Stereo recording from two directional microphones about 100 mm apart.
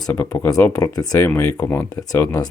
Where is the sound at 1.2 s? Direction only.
20° left (ahead or behind).